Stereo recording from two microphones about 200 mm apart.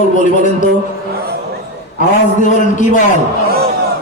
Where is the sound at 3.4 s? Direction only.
50° right (ahead or behind).